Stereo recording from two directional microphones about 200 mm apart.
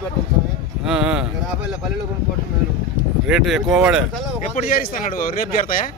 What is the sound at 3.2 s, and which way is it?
Speech, centre (ahead or behind).